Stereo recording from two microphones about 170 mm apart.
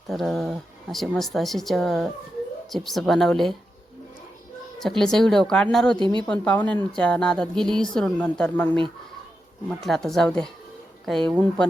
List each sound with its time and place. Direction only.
0.1 s speech: centre (ahead or behind)
4.8 s speech: 5° left (ahead or behind)
6.0 s a woman's voice: 25° right (ahead or behind)
6.2 s speech: 5° left (ahead or behind)